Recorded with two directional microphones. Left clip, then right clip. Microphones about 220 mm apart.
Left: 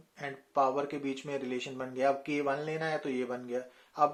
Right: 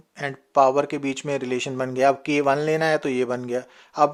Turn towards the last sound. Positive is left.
turn(degrees=-50)  # may be behind; listen again after turning